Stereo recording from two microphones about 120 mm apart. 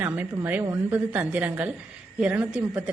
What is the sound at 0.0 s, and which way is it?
A woman's voice, 15° right (ahead or behind).